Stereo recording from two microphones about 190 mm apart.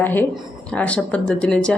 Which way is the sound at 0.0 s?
10° left (ahead or behind).